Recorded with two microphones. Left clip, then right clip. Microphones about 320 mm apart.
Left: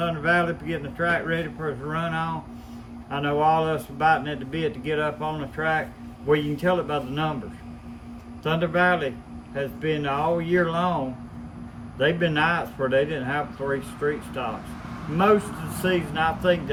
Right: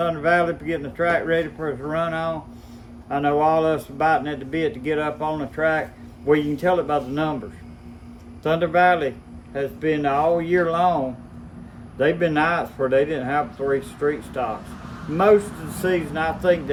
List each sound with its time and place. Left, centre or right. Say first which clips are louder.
0.0 s speech: right 3 dB; centre
8.4 s speech: right 4 dB; centre
11.9 s speech: right 3 dB; centre
15.9 s speech: right 1 dB; centre